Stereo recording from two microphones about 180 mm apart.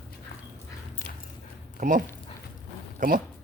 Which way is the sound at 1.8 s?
45° right (ahead or behind).